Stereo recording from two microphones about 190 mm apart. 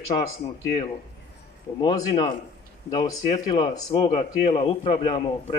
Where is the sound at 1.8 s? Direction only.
20° left (ahead or behind).